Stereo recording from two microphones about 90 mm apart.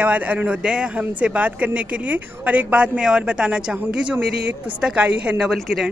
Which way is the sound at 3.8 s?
20° right (ahead or behind).